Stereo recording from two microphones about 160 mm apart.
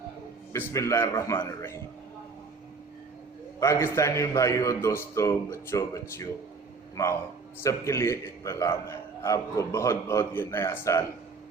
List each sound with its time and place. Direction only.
0.5 s a man's voice: 20° left (ahead or behind)
3.6 s a man's voice: 15° left (ahead or behind)